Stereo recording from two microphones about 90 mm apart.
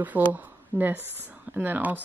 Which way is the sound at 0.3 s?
20° right (ahead or behind).